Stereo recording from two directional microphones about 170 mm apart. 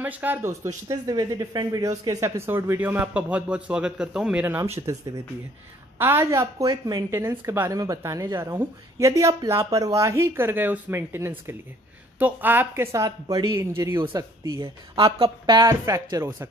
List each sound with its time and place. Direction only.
0.0 s speech: 10° right (ahead or behind)
14.0 s speech: 25° right (ahead or behind)